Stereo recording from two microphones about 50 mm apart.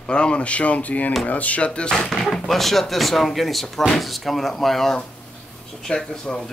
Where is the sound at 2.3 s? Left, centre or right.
Centre.